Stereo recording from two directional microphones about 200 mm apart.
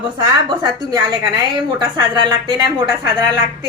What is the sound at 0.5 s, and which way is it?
A woman's voice, 20° right (ahead or behind).